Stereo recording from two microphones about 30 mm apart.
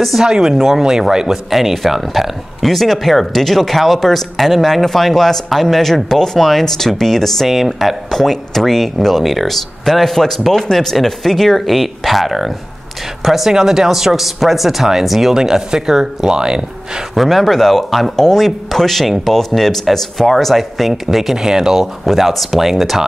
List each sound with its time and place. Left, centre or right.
0.2 s speech: right
1.5 s speech: centre
7.4 s speech: centre
8.1 s speech: centre
13.5 s speech: centre
15.3 s speech: right
17.1 s speech: centre
22.0 s speech: centre
22.6 s speech: centre